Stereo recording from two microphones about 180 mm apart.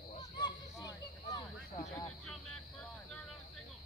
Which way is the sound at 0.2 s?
20° left (ahead or behind).